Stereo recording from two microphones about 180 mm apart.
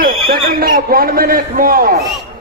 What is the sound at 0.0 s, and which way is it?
A man's voice, 50° right (ahead or behind).